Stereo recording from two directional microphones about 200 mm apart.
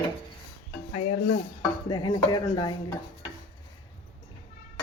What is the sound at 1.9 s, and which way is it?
Speech, 20° left (ahead or behind).